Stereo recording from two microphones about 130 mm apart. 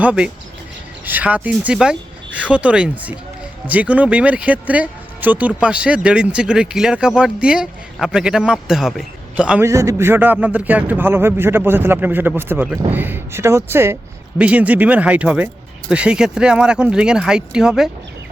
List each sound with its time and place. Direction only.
0.0 s a man's voice: 10° right (ahead or behind)
9.6 s speech: 20° right (ahead or behind); by 17.9 s 5° right (ahead or behind)